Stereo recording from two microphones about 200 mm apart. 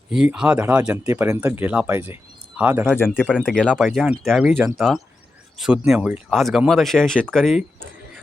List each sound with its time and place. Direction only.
0.1 s speech: 5° right (ahead or behind)
2.9 s speech: 10° left (ahead or behind)